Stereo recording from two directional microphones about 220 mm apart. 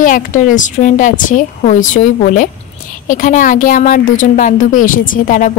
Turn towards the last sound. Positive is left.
turn(degrees=35)  # may be behind; listen again after turning